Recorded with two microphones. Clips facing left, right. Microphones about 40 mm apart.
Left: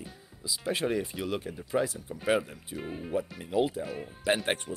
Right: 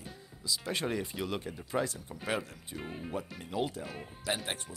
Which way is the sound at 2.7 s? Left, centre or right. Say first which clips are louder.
Left 6 dB; centre.